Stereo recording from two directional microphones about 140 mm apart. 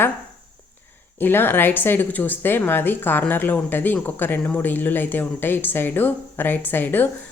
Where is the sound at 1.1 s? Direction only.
15° left (ahead or behind).